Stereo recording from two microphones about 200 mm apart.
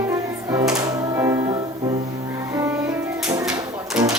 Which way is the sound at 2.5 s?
15° right (ahead or behind).